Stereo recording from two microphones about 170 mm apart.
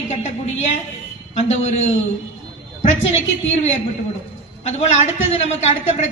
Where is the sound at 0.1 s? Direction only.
45° left (ahead or behind).